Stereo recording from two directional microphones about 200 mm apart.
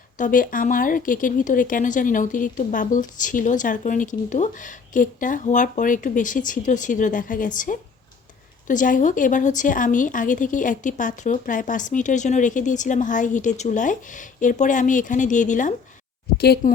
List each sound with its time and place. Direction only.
0.2 s a woman's voice: 45° left (ahead or behind)
16.4 s speech: 50° left (ahead or behind)